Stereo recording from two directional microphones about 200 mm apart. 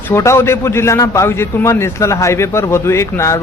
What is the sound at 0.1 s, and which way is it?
A man's voice, 15° left (ahead or behind).